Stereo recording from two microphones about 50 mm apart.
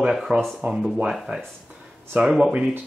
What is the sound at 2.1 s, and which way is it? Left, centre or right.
Speech, right.